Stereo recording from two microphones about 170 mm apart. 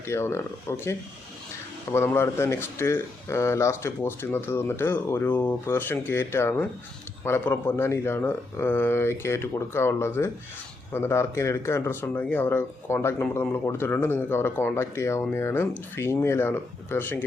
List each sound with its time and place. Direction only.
0.0 s speech: 15° left (ahead or behind)